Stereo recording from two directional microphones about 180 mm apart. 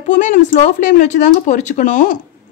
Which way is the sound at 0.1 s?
45° left (ahead or behind).